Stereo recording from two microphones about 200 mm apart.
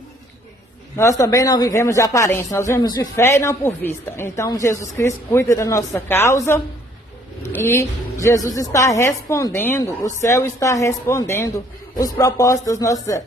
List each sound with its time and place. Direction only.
1.2 s speech: 15° left (ahead or behind)